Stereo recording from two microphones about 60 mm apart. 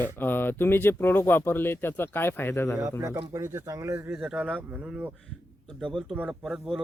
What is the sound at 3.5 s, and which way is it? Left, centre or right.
Speech, right.